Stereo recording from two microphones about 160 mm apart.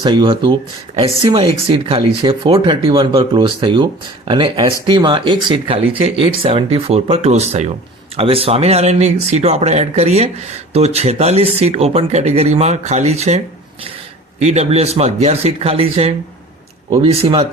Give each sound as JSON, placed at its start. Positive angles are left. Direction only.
{"t": 0.0, "sound": "speech", "side_deg": -30}